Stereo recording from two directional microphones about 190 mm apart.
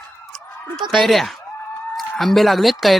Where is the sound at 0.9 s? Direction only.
Centre (ahead or behind).